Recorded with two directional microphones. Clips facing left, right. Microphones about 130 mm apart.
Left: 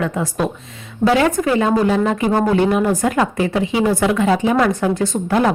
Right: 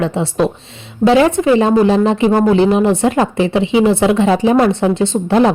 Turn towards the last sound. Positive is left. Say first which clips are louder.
# right 5 dB
turn(degrees=-25)  # may be behind; listen again after turning